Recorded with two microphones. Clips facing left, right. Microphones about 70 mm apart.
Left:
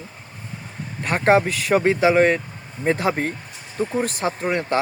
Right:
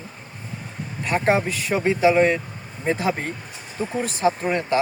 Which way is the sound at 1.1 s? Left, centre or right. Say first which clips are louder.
Left 3 dB; left.